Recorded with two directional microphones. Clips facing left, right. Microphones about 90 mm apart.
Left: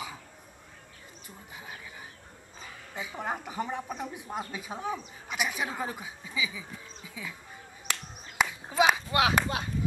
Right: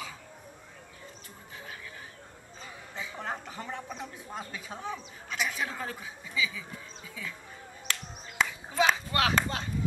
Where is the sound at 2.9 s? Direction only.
15° left (ahead or behind).